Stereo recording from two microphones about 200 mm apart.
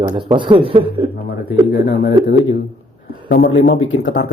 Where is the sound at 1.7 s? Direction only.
60° left (ahead or behind).